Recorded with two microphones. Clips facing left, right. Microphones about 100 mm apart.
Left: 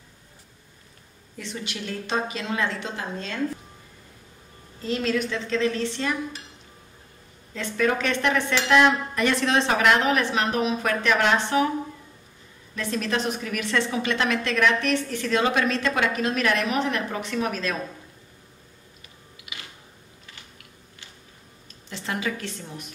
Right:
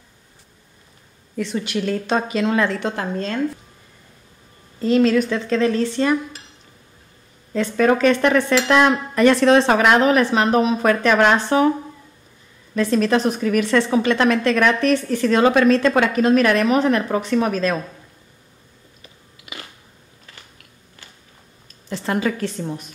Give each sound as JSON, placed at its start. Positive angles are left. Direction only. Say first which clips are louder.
{"t": 1.3, "sound": "a woman's voice", "louder": "right 11 dB", "side_deg": -70}
{"t": 4.8, "sound": "a woman's voice", "louder": "right 9 dB", "side_deg": -50}
{"t": 7.5, "sound": "speech", "louder": "right 7 dB", "side_deg": -50}
{"t": 12.7, "sound": "a woman's voice", "louder": "right 9 dB", "side_deg": -40}
{"t": 21.8, "sound": "a woman's voice", "louder": "right 8 dB", "side_deg": -45}